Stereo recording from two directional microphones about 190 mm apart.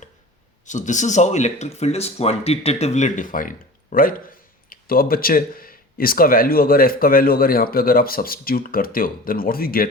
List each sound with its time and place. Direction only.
0.6 s speech: 40° left (ahead or behind)